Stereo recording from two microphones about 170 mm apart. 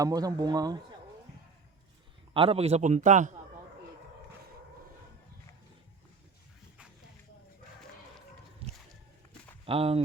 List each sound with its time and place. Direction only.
0.0 s speech: 20° right (ahead or behind)
2.3 s a man's voice: 35° right (ahead or behind)
8.6 s a sound: 35° right (ahead or behind)
9.6 s a man's voice: 35° right (ahead or behind)